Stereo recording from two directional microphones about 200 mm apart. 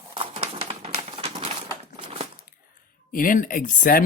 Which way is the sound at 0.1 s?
25° right (ahead or behind).